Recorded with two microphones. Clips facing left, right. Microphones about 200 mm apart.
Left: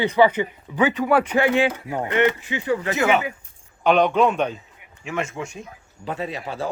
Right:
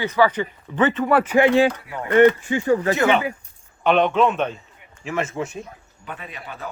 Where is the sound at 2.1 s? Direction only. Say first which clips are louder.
Right 7 dB; 45° right (ahead or behind).